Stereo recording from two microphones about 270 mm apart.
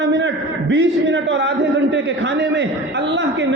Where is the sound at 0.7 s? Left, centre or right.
Right.